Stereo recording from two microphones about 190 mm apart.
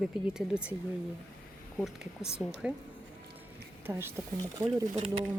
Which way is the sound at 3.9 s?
15° right (ahead or behind).